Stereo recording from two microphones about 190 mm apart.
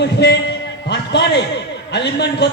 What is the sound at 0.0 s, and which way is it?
A man's voice, 60° left (ahead or behind).